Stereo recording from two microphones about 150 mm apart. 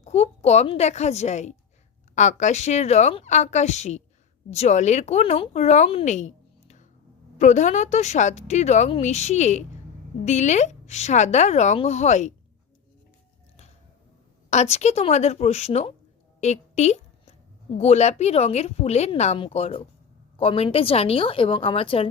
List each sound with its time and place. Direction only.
0.0 s speech: 45° left (ahead or behind)
14.5 s speech: 50° left (ahead or behind)
16.4 s a sound: 50° left (ahead or behind)
17.7 s a woman's voice: 45° left (ahead or behind)